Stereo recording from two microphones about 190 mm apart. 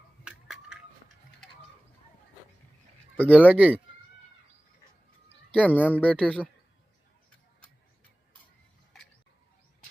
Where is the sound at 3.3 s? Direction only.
10° right (ahead or behind).